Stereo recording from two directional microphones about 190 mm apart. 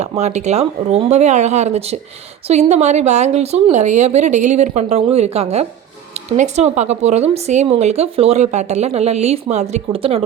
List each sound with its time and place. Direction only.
0.0 s speech: 35° right (ahead or behind)